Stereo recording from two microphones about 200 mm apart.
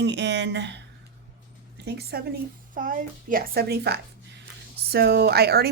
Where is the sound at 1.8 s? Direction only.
55° right (ahead or behind).